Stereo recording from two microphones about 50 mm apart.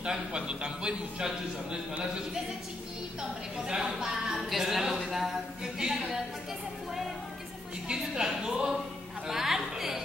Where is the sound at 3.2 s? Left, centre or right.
Centre.